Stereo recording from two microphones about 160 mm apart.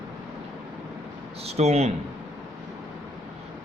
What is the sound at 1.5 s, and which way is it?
Speech, 40° right (ahead or behind).